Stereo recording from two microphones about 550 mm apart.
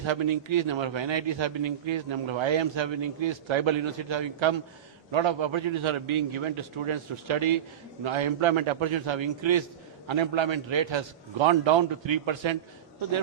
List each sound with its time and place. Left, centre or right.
0.0 s a man's voice: right